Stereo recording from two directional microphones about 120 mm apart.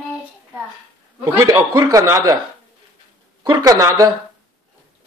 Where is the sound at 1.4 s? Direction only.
35° right (ahead or behind).